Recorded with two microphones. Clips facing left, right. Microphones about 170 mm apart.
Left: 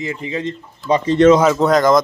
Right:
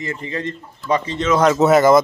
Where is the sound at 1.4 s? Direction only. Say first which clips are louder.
Right 1 dB; centre (ahead or behind).